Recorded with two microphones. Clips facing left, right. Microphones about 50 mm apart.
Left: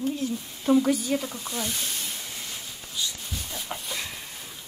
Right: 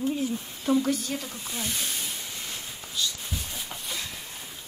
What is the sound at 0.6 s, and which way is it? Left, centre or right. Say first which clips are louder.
Speech: left 3 dB; centre.